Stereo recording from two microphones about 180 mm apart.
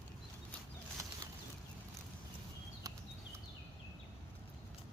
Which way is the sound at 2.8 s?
20° right (ahead or behind).